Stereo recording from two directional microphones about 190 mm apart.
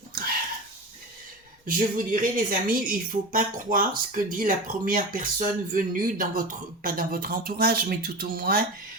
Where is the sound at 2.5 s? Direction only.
45° right (ahead or behind).